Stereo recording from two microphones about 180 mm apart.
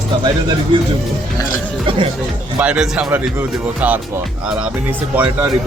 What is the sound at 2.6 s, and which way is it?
Speech, 5° right (ahead or behind).